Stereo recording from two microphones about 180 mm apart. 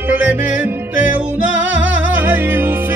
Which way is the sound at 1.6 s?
90° right.